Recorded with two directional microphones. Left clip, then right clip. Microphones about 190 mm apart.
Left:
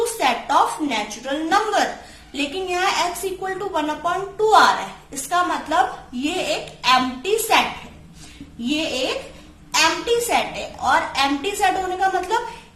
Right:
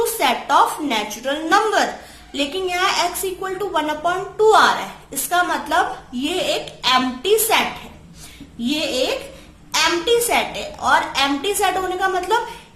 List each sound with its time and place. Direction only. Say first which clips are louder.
0.0 s a woman's voice: right 1 dB; 25° right (ahead or behind)
8.6 s a woman's voice: right 2 dB; 30° right (ahead or behind)